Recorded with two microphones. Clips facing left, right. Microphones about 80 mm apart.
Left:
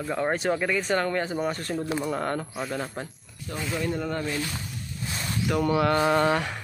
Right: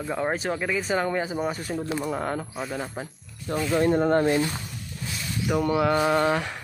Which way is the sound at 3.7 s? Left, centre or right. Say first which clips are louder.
Right 9 dB; right.